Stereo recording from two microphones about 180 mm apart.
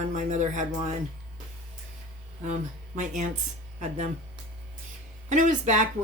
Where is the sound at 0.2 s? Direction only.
45° right (ahead or behind).